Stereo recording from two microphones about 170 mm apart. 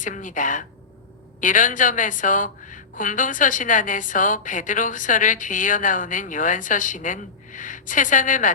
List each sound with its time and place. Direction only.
0.0 s a woman's voice: 50° left (ahead or behind)